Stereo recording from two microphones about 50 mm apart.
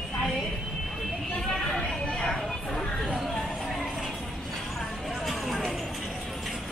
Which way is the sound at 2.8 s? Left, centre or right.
Centre.